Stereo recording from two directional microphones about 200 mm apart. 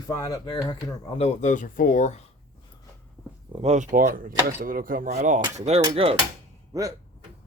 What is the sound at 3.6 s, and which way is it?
Speech, 35° right (ahead or behind).